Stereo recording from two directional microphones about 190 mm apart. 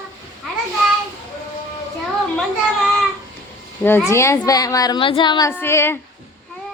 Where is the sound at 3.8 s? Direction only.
10° left (ahead or behind).